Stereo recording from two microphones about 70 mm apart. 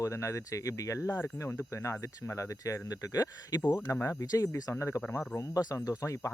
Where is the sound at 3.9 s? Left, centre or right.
Left.